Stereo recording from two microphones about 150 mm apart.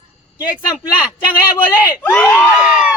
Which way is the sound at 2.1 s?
10° left (ahead or behind).